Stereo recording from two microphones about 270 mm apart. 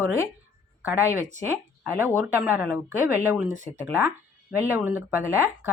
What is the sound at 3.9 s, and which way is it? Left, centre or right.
Speech, centre.